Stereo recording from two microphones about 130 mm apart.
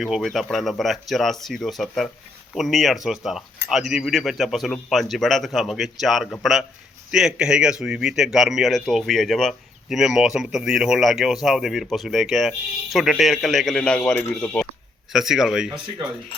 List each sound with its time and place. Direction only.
0.0 s a man's voice: centre (ahead or behind)
15.1 s a man's voice: 5° right (ahead or behind)